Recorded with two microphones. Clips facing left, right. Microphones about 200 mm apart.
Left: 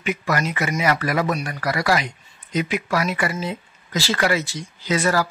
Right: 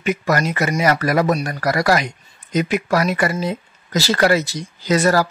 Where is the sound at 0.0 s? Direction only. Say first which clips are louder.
Right 4 dB; 40° right (ahead or behind).